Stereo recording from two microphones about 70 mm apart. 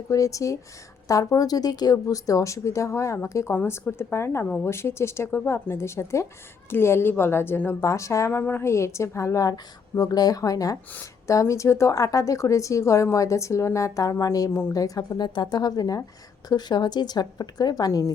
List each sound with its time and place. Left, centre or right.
0.1 s a woman's voice: left
7.8 s a woman's voice: left
8.4 s a woman's voice: left
8.6 s a woman's voice: left
16.5 s speech: left